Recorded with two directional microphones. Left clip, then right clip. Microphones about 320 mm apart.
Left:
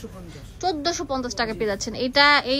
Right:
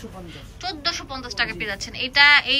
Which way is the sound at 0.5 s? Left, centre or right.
Centre.